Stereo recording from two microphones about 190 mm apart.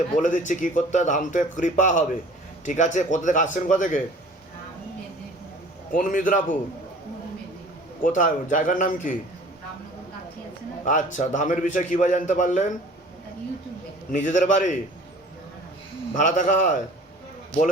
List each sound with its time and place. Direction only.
0.2 s speech: 40° left (ahead or behind)
5.9 s speech: 45° left (ahead or behind)
8.0 s speech: 45° left (ahead or behind)
10.8 s speech: 40° left (ahead or behind)
14.1 s speech: 40° left (ahead or behind)
16.1 s speech: 40° left (ahead or behind)